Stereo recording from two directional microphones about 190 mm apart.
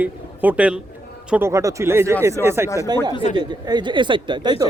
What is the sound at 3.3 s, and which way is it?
Speech, 25° right (ahead or behind).